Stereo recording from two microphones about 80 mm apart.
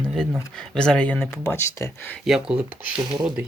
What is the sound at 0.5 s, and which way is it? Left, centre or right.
Speech, centre.